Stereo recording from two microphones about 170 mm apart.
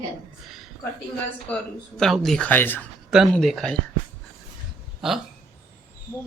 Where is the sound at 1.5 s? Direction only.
5° left (ahead or behind).